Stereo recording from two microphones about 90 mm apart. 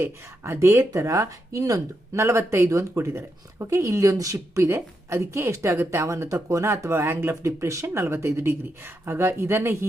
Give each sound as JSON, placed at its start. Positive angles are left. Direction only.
{"t": 0.0, "sound": "speech", "side_deg": -25}